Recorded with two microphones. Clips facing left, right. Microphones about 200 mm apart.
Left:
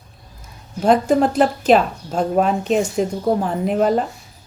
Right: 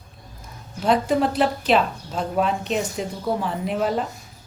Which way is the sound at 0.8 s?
45° left (ahead or behind).